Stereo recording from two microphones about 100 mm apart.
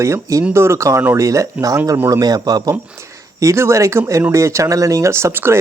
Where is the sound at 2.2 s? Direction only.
40° right (ahead or behind).